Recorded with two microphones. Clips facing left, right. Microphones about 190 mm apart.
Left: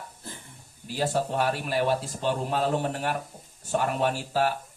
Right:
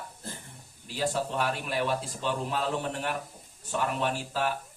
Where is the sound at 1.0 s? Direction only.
50° left (ahead or behind).